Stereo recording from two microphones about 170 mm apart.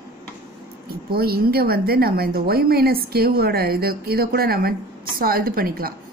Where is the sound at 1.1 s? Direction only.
65° right (ahead or behind).